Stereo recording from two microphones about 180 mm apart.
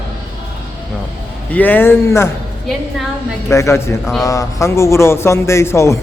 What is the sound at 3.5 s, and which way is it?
A man's voice, 15° left (ahead or behind).